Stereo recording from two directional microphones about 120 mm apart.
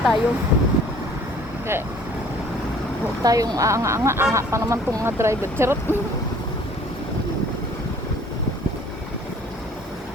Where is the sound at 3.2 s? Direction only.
30° right (ahead or behind).